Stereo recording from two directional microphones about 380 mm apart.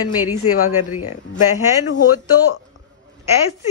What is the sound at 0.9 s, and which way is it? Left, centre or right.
Speech, left.